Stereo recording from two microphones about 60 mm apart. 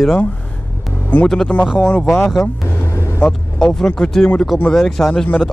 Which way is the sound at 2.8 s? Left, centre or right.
Left.